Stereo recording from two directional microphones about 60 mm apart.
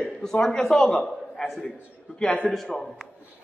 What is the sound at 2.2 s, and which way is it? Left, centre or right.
Speech, centre.